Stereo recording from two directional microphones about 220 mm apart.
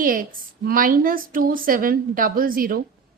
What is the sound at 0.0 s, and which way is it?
A woman's voice, 40° right (ahead or behind).